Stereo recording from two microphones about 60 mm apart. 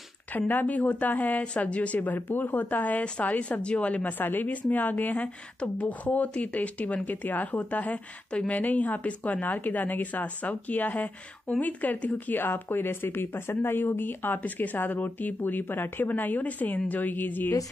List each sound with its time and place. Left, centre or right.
0.3 s a woman's voice: left
4.2 s a woman's voice: left